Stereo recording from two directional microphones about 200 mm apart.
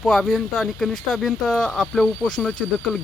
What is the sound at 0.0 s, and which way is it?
Speech, centre (ahead or behind).